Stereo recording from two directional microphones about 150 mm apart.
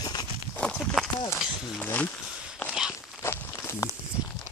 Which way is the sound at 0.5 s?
10° left (ahead or behind).